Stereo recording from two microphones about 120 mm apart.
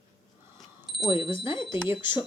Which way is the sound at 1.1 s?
45° left (ahead or behind).